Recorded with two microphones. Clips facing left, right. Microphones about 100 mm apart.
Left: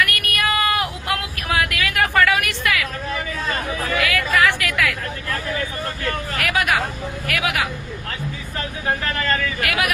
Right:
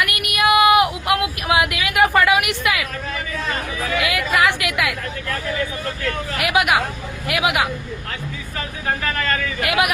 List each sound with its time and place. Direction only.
0.0 s a sound: 15° right (ahead or behind)
4.0 s chatter: 20° right (ahead or behind)
6.4 s hubbub: 15° right (ahead or behind)
7.3 s speech: 20° right (ahead or behind)
9.6 s speech: 20° right (ahead or behind)